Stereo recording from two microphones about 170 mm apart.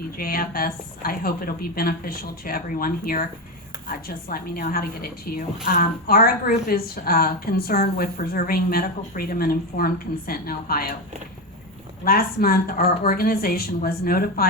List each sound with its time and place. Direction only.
0.2 s a woman's voice: 60° left (ahead or behind)
12.0 s a woman's voice: 60° left (ahead or behind)